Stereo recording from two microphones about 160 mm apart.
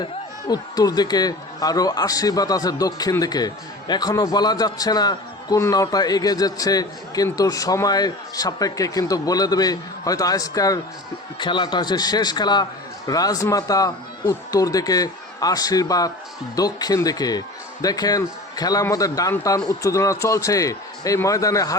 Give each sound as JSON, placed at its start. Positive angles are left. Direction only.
{"t": 0.0, "sound": "speech", "side_deg": 25}